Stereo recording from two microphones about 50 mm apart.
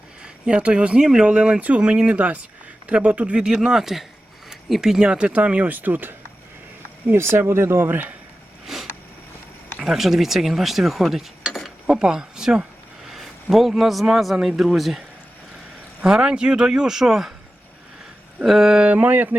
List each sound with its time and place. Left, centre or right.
0.2 s speech: centre
3.4 s speech: centre; by 6.1 s right
7.1 s speech: right
7.9 s a sound: right
8.6 s a sound: centre
9.8 s speech: centre
11.9 s a man's voice: centre
16.0 s speech: centre
18.4 s speech: centre
18.8 s speech: right
19.0 s a sound: right